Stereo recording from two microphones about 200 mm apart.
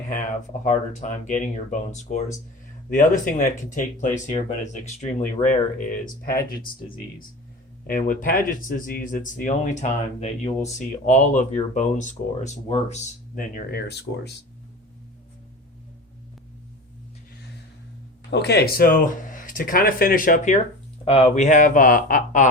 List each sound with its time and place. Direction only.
0.6 s speech: 40° left (ahead or behind); by 14.4 s 55° left (ahead or behind)
18.3 s speech: 55° left (ahead or behind); by 20.6 s 40° left (ahead or behind)
21.0 s speech: 30° left (ahead or behind)